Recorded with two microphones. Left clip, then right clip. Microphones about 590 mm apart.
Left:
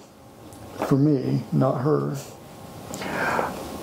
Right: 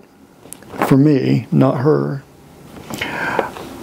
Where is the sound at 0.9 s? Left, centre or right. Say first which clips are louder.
Right 8 dB; right.